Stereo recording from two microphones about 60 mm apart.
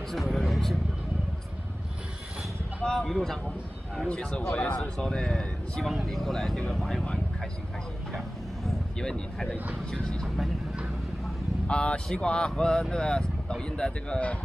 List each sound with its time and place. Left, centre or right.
0.1 s a man's voice: centre
2.8 s speech: centre
8.6 s speech: centre
10.2 s speech: centre
11.6 s speech: centre